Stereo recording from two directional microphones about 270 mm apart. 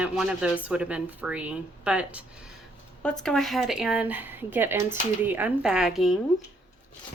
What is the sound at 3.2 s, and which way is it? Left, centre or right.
Speech, centre.